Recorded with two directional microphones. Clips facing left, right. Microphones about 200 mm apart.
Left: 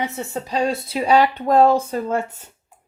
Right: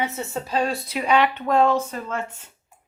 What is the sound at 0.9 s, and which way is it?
Speech, 30° left (ahead or behind).